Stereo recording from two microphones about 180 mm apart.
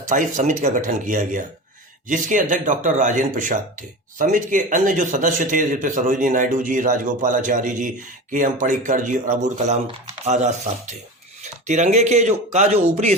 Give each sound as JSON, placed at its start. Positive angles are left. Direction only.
{"t": 0.1, "sound": "speech", "side_deg": -45}